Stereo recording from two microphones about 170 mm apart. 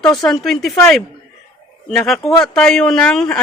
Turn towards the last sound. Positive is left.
turn(degrees=5)  # may be behind; listen again after turning